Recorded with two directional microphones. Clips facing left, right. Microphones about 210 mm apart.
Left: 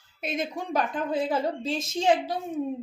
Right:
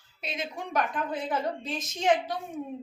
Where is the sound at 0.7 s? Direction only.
30° left (ahead or behind).